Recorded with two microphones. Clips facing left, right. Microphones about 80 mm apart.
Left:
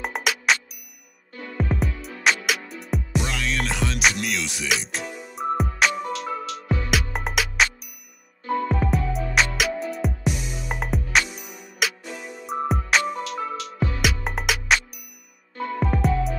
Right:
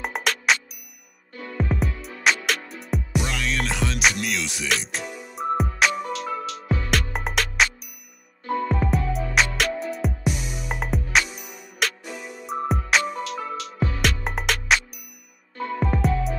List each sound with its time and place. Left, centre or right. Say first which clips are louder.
0.0 s music: even; centre
10.3 s music: even; centre
10.7 s music: even; centre